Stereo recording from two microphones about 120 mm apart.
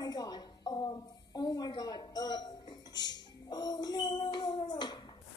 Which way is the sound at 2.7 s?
35° left (ahead or behind).